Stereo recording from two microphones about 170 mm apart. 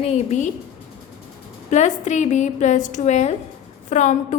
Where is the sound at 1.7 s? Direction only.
45° left (ahead or behind).